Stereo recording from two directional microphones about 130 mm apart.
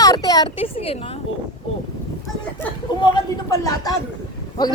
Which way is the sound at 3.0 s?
30° left (ahead or behind).